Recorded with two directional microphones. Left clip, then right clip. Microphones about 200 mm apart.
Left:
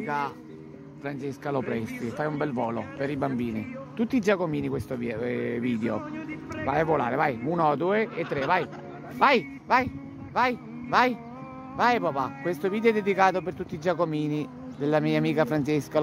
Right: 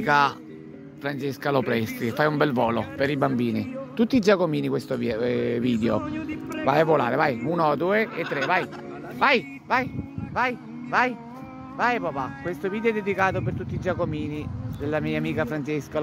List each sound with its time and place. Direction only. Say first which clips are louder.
0.0 s a man's voice: right 9 dB; 35° right (ahead or behind)
1.0 s speech: right 6 dB; 20° right (ahead or behind)
6.0 s speech: right 4 dB; 70° right (ahead or behind)
6.6 s speech: right 5 dB; 15° right (ahead or behind)
9.2 s a woman's voice: even; 10° left (ahead or behind)